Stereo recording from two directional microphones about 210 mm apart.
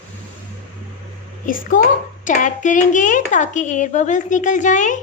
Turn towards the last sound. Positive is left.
turn(degrees=35)  # may be behind; listen again after turning